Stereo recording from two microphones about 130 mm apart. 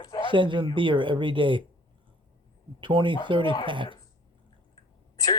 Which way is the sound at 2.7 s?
40° right (ahead or behind).